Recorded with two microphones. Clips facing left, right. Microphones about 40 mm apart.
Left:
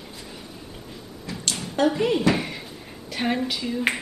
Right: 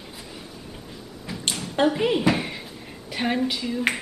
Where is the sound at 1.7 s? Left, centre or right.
Centre.